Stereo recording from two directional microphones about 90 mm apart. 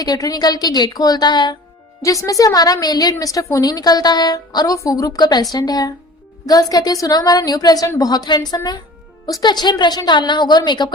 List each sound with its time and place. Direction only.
0.0 s a woman's voice: 45° left (ahead or behind)
2.0 s a woman's voice: 40° left (ahead or behind)